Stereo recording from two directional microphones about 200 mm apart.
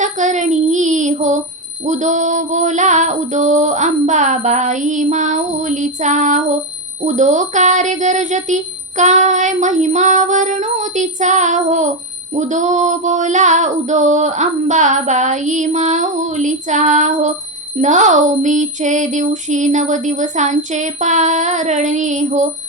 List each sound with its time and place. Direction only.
0.0 s child singing: 40° right (ahead or behind)
1.8 s speech: 35° right (ahead or behind)